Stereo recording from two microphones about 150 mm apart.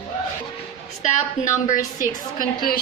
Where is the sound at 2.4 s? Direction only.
70° left (ahead or behind).